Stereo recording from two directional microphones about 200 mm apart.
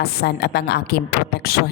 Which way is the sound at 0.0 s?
55° left (ahead or behind).